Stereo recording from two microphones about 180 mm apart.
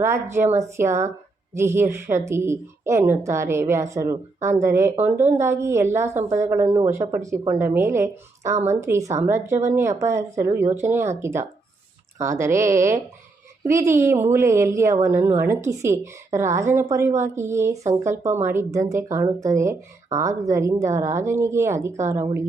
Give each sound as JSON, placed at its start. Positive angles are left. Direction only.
{"t": 0.0, "sound": "speech", "side_deg": -15}